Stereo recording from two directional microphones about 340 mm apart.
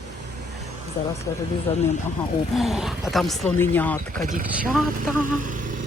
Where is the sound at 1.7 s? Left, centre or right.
Centre.